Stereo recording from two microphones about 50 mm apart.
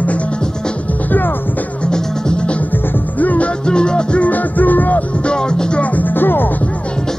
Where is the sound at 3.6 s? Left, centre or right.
Centre.